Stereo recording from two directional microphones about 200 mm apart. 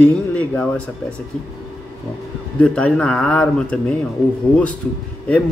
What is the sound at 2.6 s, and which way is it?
Speech, 5° left (ahead or behind).